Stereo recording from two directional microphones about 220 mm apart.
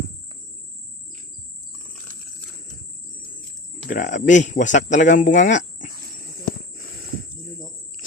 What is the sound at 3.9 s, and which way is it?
Speech, 35° left (ahead or behind).